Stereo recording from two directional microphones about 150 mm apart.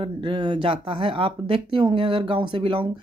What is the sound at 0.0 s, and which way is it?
Speech, 35° right (ahead or behind).